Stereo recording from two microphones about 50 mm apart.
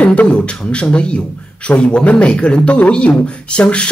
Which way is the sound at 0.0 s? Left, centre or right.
Left.